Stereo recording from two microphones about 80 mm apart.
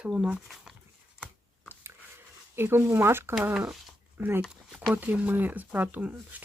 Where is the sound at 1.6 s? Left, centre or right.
Right.